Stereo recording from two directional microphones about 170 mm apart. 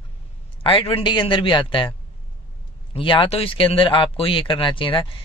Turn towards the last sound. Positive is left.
turn(degrees=30)  # may be behind; listen again after turning